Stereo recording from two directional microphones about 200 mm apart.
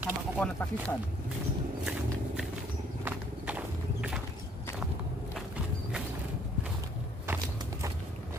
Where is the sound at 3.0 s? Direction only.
5° right (ahead or behind).